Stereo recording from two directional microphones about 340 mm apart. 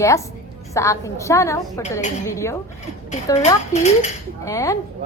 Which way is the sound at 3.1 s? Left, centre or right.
Centre.